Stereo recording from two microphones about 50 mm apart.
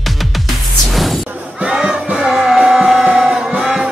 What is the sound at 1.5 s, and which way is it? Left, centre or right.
Crowd, centre.